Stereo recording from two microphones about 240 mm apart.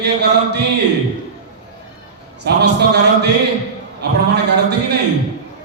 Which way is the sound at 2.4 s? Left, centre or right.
Right.